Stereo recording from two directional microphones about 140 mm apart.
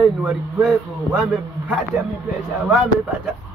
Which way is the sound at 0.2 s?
5° right (ahead or behind).